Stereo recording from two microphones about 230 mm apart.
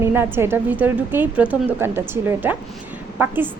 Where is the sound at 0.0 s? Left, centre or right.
Centre.